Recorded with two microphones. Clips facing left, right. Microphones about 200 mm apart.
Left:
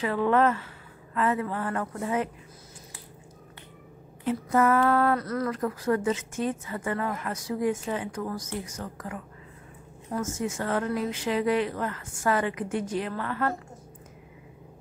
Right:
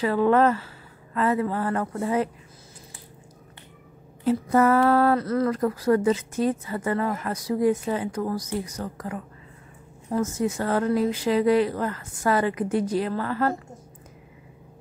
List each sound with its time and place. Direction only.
0.0 s a woman's voice: 35° right (ahead or behind)
4.2 s a woman's voice: 35° right (ahead or behind)